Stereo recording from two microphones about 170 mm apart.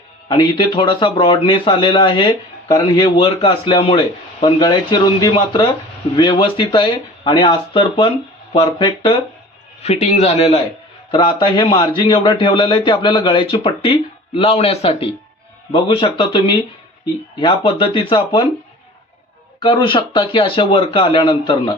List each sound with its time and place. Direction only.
0.3 s speech: 25° left (ahead or behind)
9.8 s a man's voice: 40° left (ahead or behind)
19.5 s speech: 30° left (ahead or behind)